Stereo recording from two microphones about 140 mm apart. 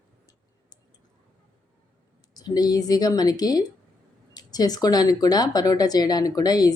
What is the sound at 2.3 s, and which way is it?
Speech, 30° left (ahead or behind).